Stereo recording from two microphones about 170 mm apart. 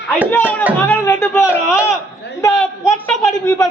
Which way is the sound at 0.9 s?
15° left (ahead or behind).